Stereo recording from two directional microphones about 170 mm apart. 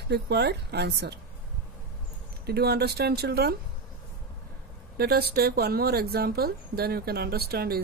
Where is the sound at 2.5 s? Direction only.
70° right (ahead or behind).